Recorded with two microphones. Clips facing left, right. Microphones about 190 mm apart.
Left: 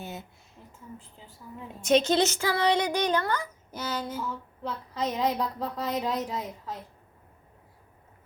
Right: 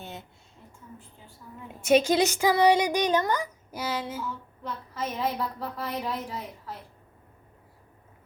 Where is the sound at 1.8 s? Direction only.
10° right (ahead or behind).